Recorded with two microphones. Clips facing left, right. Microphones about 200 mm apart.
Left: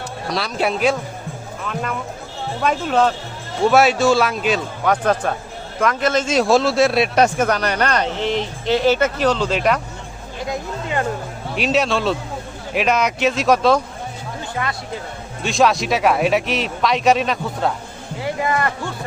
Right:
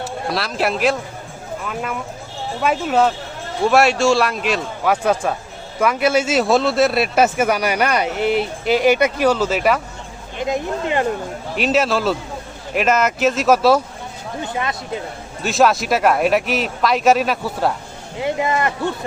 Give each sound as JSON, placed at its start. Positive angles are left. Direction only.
{"t": 0.3, "sound": "a man's voice", "side_deg": 0}
{"t": 10.3, "sound": "speech", "side_deg": -20}
{"t": 11.5, "sound": "speech", "side_deg": 0}
{"t": 14.4, "sound": "speech", "side_deg": -20}
{"t": 15.4, "sound": "speech", "side_deg": 0}
{"t": 18.2, "sound": "speech", "side_deg": -20}